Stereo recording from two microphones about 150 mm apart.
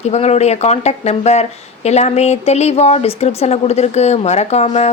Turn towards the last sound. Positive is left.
turn(degrees=45)  # may be behind; listen again after turning